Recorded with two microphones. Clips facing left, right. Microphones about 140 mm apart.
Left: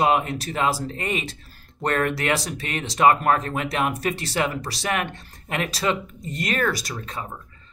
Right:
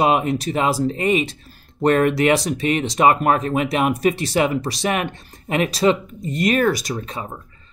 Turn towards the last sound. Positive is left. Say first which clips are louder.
# right 5 dB
turn(degrees=-15)  # may be behind; listen again after turning